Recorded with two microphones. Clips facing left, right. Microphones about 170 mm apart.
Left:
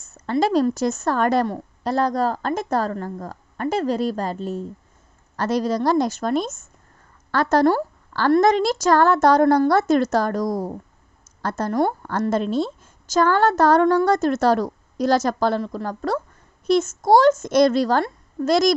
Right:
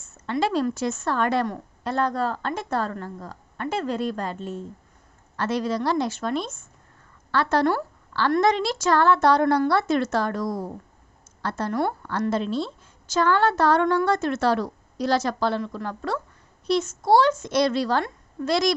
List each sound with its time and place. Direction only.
0.0 s a woman's voice: 40° left (ahead or behind)